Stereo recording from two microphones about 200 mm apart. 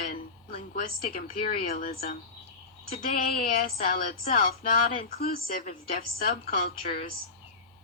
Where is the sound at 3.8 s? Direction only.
50° left (ahead or behind).